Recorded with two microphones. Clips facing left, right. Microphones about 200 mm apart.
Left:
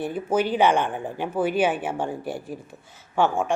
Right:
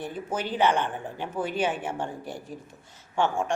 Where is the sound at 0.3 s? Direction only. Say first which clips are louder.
Left 5 dB; 10° left (ahead or behind).